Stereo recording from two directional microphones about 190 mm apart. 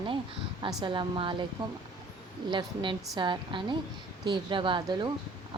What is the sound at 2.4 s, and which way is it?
Speech, 25° right (ahead or behind).